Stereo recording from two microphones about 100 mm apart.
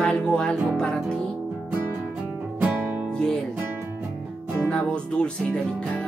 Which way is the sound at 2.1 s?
15° right (ahead or behind).